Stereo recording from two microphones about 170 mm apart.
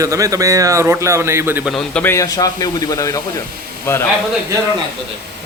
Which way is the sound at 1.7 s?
10° left (ahead or behind).